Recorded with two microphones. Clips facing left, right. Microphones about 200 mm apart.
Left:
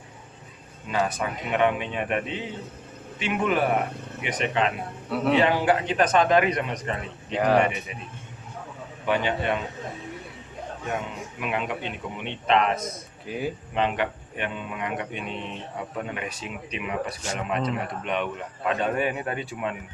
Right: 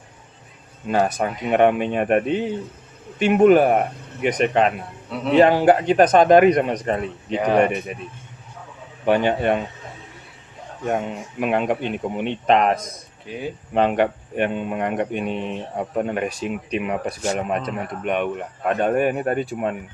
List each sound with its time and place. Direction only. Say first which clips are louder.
0.9 s speech: right 6 dB; 45° right (ahead or behind)
7.3 s speech: right 2 dB; centre (ahead or behind)
7.6 s speech: right 6 dB; 50° right (ahead or behind)
9.0 s speech: right 7 dB; 50° right (ahead or behind)
10.8 s speech: right 8 dB; 50° right (ahead or behind)
13.7 s speech: right 8 dB; 50° right (ahead or behind)